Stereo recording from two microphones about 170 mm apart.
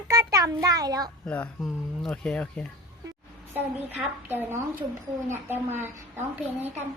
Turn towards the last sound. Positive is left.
turn(degrees=-15)  # may be behind; listen again after turning